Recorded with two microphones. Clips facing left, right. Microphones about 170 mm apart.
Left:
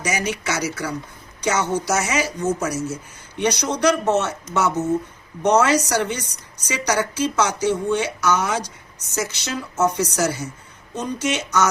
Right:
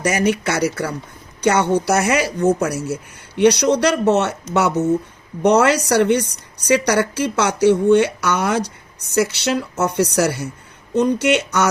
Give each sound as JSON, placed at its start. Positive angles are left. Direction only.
{"t": 0.0, "sound": "a woman's voice", "side_deg": -60}